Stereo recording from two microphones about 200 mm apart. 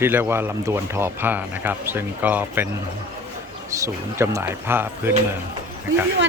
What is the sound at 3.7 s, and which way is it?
Speech, 15° right (ahead or behind).